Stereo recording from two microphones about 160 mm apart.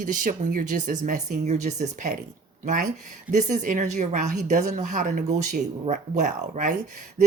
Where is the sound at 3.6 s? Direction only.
50° right (ahead or behind).